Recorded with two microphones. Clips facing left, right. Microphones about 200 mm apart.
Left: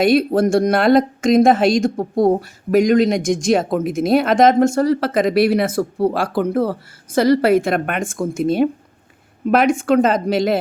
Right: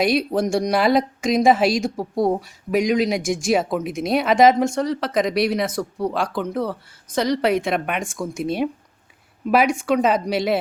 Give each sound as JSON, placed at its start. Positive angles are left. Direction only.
{"t": 0.0, "sound": "speech", "side_deg": 0}
{"t": 2.0, "sound": "speech", "side_deg": 25}
{"t": 2.4, "sound": "speech", "side_deg": 0}
{"t": 5.7, "sound": "speech", "side_deg": 30}
{"t": 6.1, "sound": "speech", "side_deg": 5}